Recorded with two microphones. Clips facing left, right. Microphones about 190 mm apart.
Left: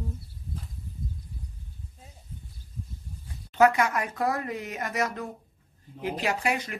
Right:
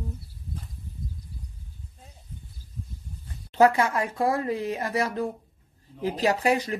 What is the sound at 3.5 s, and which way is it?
Speech, 30° right (ahead or behind).